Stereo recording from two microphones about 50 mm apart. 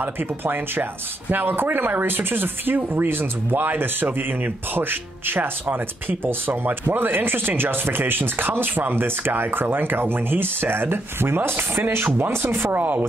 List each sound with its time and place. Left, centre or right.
0.0 s speech: right
11.5 s speech: right
11.9 s speech: right